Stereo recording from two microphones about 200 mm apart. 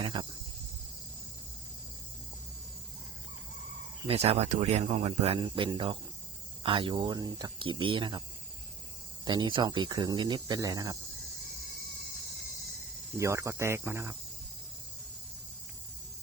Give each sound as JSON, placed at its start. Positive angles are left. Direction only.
{"t": 0.0, "sound": "cricket", "side_deg": -20}
{"t": 4.0, "sound": "speech", "side_deg": -30}
{"t": 9.2, "sound": "speech", "side_deg": -20}
{"t": 13.1, "sound": "speech", "side_deg": -15}